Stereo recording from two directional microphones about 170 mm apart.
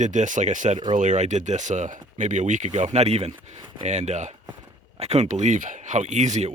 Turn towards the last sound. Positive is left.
turn(degrees=-45)  # may be behind; listen again after turning